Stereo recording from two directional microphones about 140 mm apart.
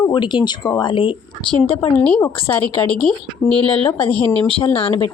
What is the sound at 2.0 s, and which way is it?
Speech, 5° left (ahead or behind).